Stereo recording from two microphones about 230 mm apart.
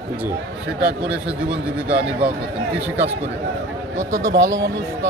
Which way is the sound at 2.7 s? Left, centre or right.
Centre.